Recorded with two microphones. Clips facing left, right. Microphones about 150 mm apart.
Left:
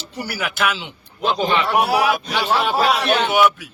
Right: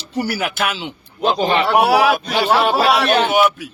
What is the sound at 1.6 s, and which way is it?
A man's voice, 80° right.